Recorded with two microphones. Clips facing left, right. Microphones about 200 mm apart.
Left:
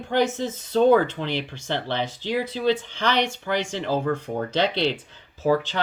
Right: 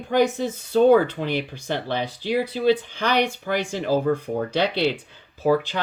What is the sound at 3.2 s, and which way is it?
Speech, 55° right (ahead or behind).